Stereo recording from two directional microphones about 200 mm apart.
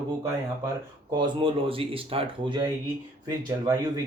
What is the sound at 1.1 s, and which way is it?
Speech, 25° right (ahead or behind).